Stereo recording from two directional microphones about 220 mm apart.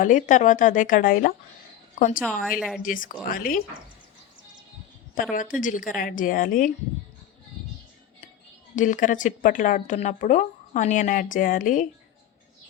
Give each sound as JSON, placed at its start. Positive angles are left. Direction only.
{"t": 0.0, "sound": "speech", "side_deg": 35}
{"t": 2.4, "sound": "a woman's voice", "side_deg": -5}
{"t": 2.8, "sound": "speech", "side_deg": 40}
{"t": 5.3, "sound": "speech", "side_deg": 35}
{"t": 8.7, "sound": "speech", "side_deg": 35}